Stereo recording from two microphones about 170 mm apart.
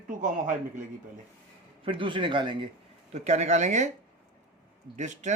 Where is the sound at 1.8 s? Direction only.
30° right (ahead or behind).